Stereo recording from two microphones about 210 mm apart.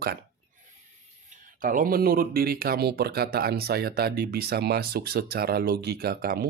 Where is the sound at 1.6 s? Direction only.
40° right (ahead or behind).